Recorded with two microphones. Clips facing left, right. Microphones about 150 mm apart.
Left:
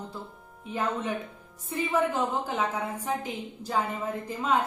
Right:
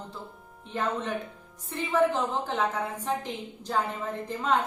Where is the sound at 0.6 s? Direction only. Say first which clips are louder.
Even; 10° left (ahead or behind).